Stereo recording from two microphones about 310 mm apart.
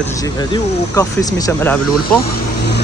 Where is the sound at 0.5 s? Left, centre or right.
Centre.